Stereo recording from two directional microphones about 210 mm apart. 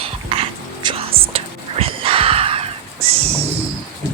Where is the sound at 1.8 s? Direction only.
25° right (ahead or behind).